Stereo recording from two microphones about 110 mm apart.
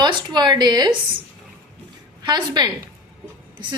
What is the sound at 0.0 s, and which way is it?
Speech, 40° right (ahead or behind).